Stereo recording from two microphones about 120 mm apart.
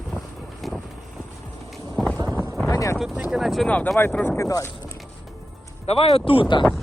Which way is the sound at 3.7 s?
10° left (ahead or behind).